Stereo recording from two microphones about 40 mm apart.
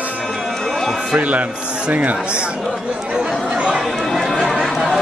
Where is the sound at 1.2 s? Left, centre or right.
Right.